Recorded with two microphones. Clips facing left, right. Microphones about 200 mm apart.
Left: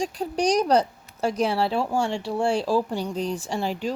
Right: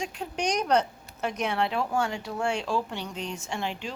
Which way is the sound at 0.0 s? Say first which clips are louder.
Left 6 dB; 35° left (ahead or behind).